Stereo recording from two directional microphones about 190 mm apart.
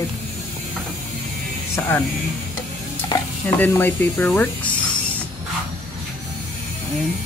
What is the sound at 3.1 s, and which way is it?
Stir, 20° left (ahead or behind).